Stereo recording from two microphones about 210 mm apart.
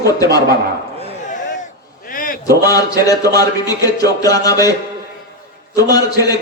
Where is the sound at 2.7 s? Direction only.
15° left (ahead or behind).